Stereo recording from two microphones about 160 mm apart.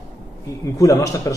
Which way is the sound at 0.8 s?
20° left (ahead or behind).